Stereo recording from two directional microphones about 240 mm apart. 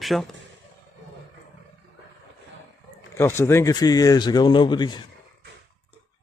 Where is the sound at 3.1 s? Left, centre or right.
Centre.